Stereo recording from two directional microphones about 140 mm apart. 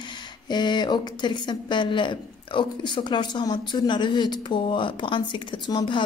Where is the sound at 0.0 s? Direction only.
30° left (ahead or behind).